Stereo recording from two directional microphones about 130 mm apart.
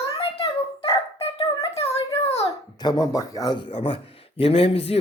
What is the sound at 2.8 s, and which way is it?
Speech, 30° left (ahead or behind).